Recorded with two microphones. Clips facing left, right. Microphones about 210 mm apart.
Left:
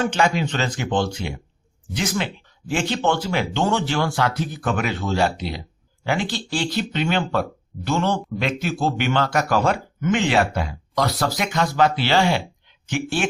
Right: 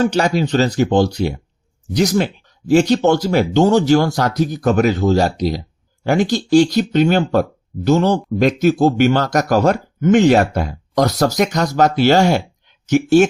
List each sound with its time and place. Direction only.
0.0 s speech: 40° right (ahead or behind)